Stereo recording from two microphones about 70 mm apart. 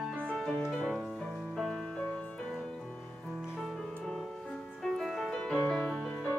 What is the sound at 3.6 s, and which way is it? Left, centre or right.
Music, centre.